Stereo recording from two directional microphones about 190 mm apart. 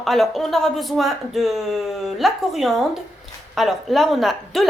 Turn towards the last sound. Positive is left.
turn(degrees=0)  # may be behind; listen again after turning